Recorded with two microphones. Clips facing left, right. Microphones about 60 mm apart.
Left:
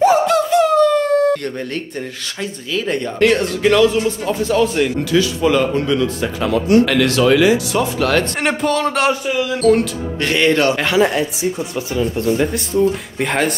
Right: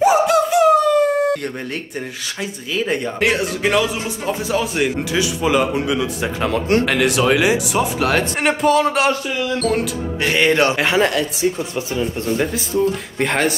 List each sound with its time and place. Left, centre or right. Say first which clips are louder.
0.0 s speech: left 1 dB; centre
6.4 s speech: left 3 dB; right
6.9 s speech: left 2 dB; centre
8.4 s speech: right 2 dB; centre
10.3 s speech: left 1 dB; centre
12.4 s speech: left 2 dB; centre